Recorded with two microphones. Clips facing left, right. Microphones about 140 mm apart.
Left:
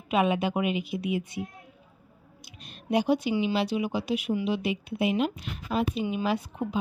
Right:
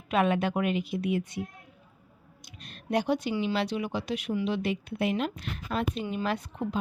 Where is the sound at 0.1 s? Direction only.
5° left (ahead or behind).